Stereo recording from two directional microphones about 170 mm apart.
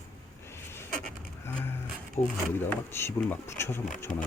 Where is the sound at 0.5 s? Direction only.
15° left (ahead or behind).